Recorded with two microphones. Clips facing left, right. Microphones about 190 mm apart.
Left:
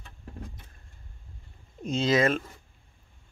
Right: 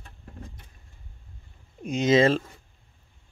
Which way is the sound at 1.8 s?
15° right (ahead or behind).